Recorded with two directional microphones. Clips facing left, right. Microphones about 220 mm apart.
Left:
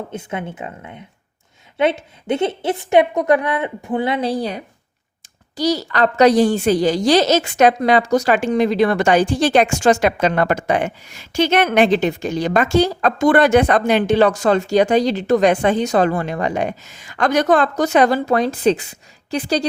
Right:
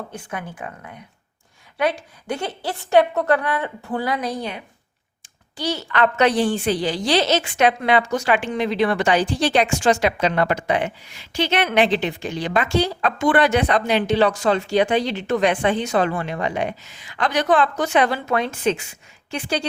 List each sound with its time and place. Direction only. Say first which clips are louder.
0.1 s a woman's voice: left 5 dB; 25° left (ahead or behind)